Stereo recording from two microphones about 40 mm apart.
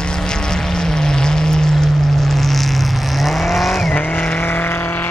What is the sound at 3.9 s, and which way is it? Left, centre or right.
Vehicle, left.